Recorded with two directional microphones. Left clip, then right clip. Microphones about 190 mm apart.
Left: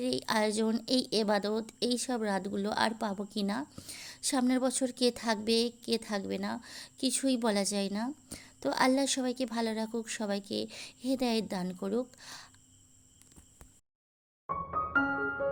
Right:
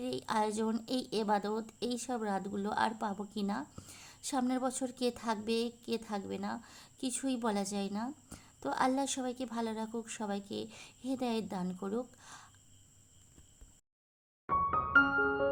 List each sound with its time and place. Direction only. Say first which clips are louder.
0.0 s a woman's voice: left 3 dB; 20° left (ahead or behind)